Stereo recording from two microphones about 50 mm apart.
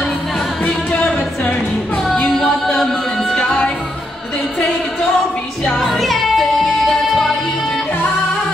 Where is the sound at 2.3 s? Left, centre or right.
Centre.